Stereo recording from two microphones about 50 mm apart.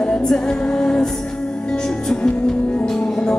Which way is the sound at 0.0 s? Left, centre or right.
Centre.